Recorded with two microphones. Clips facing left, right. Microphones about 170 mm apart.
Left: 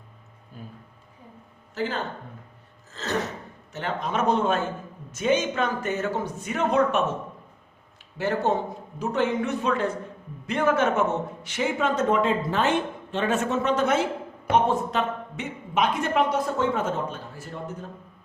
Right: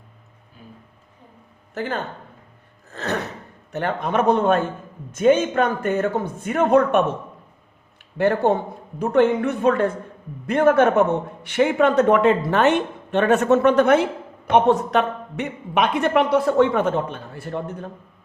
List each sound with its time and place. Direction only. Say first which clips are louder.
1.7 s a man's voice: right 2 dB; 55° right (ahead or behind)
8.2 s a man's voice: right 6 dB; 60° right (ahead or behind)